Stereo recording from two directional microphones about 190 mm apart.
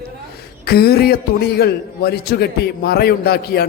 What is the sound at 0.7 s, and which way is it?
A man's voice, 55° left (ahead or behind).